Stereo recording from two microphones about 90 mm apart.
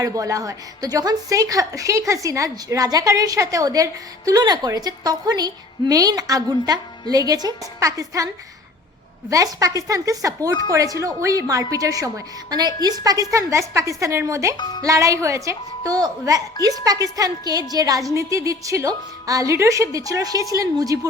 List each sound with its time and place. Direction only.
0.0 s a woman's voice: 40° right (ahead or behind)
9.3 s a woman's voice: 40° right (ahead or behind)
14.5 s speech: 55° left (ahead or behind)
14.8 s a woman's voice: 35° right (ahead or behind)